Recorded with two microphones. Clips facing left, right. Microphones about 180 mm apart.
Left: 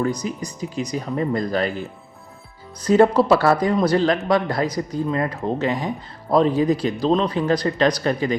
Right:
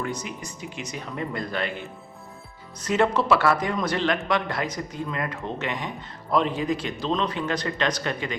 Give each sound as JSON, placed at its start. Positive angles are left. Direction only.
{"t": 0.0, "sound": "a man's voice", "side_deg": 35}